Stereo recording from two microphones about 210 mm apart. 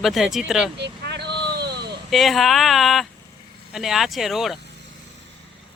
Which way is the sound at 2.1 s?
Centre (ahead or behind).